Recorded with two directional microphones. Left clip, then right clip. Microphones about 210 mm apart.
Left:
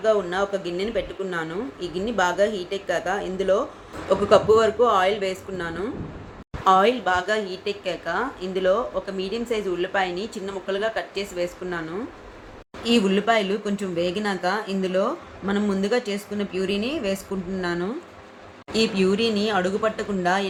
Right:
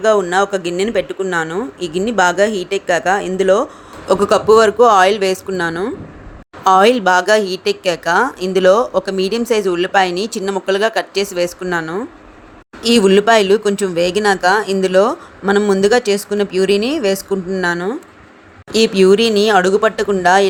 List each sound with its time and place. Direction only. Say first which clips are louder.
0.0 s speech: right 9 dB; 45° right (ahead or behind)